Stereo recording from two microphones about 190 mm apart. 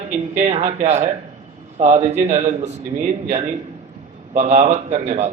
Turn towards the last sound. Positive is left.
turn(degrees=-40)  # may be behind; listen again after turning